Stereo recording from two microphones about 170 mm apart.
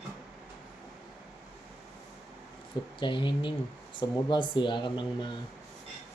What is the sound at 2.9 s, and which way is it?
Speech, 30° left (ahead or behind).